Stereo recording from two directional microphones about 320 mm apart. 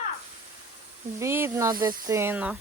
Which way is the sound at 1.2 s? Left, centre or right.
Centre.